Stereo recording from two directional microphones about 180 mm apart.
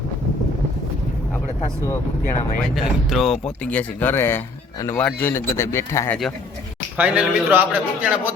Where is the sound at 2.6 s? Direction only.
Centre (ahead or behind); by 6.1 s 15° left (ahead or behind).